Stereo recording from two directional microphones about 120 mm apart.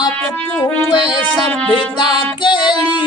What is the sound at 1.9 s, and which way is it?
Music, 40° left (ahead or behind).